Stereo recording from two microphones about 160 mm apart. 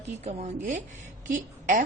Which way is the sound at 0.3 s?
45° right (ahead or behind).